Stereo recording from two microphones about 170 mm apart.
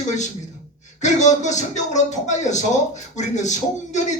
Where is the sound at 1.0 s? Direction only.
45° left (ahead or behind).